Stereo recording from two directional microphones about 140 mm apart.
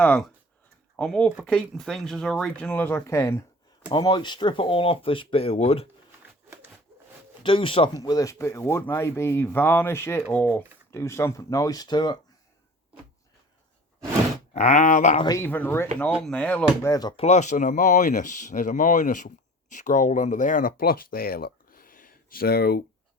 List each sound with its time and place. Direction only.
0.0 s speech: 10° left (ahead or behind)
3.8 s speech: 30° left (ahead or behind)
7.4 s speech: 40° left (ahead or behind)
8.0 s speech: 25° left (ahead or behind); by 10.6 s 10° left (ahead or behind)
10.9 s speech: 20° left (ahead or behind)
14.5 s speech: 55° left (ahead or behind)
15.4 s speech: 15° left (ahead or behind)
16.8 s speech: 25° left (ahead or behind)
17.2 s speech: 55° left (ahead or behind); by 22.8 s 90° left